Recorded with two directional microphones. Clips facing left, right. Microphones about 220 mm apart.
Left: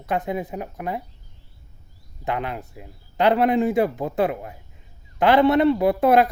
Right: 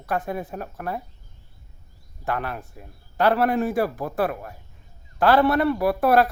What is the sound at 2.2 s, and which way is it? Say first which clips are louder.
Speech: left 1 dB; 20° left (ahead or behind).